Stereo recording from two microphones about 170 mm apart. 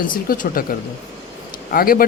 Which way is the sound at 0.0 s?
55° left (ahead or behind).